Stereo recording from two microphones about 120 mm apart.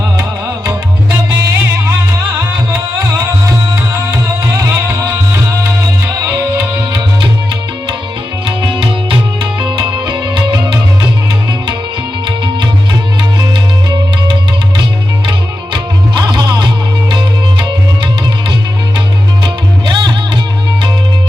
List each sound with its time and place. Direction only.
0.2 s music: 20° right (ahead or behind)
3.9 s music: 20° right (ahead or behind)
8.4 s music: 45° right (ahead or behind)
15.3 s music: 40° right (ahead or behind)
19.9 s music: 40° right (ahead or behind)